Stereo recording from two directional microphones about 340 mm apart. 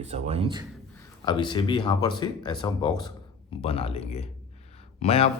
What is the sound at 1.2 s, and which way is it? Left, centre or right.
A man's voice, centre.